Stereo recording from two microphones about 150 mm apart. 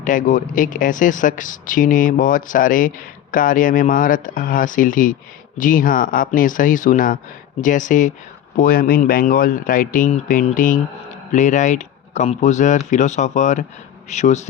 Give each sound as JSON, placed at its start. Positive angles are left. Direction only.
{"t": 0.0, "sound": "speech", "side_deg": 60}